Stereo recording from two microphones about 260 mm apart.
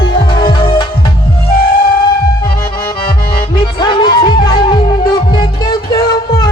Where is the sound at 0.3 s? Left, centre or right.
Centre.